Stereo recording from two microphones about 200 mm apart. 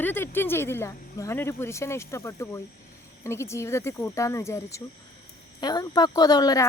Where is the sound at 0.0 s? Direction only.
10° left (ahead or behind).